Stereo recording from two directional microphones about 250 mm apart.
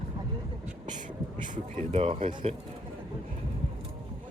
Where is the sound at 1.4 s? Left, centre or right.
Right.